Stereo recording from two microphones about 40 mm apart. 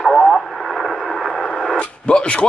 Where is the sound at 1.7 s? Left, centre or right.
Left.